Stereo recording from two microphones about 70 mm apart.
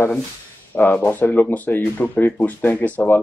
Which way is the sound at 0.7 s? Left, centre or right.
Left.